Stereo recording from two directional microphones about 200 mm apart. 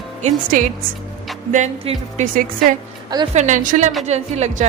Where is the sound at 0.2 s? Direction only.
35° right (ahead or behind).